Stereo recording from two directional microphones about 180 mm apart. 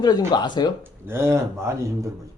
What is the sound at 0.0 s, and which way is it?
Speech, 20° left (ahead or behind).